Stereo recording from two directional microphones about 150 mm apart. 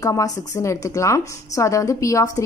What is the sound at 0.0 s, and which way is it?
A woman's voice, 20° left (ahead or behind).